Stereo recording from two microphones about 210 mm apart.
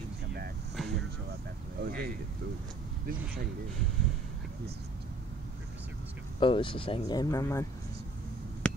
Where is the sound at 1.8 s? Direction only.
45° right (ahead or behind).